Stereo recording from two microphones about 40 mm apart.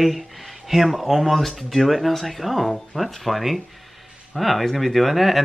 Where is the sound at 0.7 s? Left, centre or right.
Centre.